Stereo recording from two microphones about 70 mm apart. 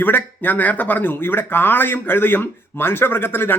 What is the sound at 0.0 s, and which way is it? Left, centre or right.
Speech, left.